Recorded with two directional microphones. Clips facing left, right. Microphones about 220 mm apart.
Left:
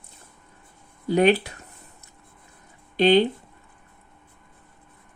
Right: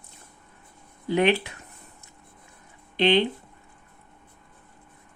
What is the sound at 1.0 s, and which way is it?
Speech, 40° left (ahead or behind).